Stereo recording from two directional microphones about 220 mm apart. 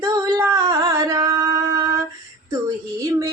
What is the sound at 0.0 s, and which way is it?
Singing, 15° right (ahead or behind).